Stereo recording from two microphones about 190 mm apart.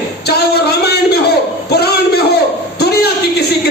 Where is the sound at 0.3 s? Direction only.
60° left (ahead or behind).